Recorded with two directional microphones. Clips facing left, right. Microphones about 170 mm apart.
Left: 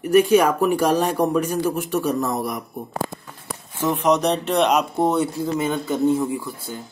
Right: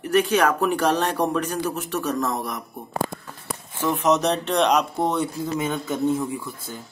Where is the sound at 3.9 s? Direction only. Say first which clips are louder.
Left 1 dB; centre (ahead or behind).